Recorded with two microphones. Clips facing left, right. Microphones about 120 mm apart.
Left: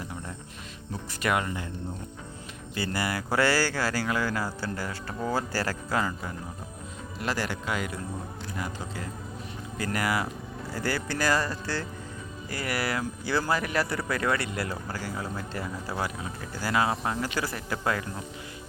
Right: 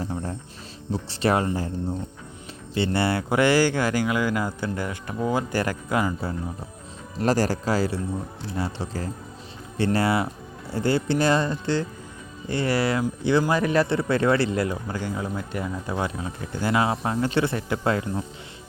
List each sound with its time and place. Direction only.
0.0 s cricket: 35° right (ahead or behind)
0.9 s speech: 30° right (ahead or behind)
2.7 s speech: 25° right (ahead or behind)
7.2 s speech: 40° right (ahead or behind)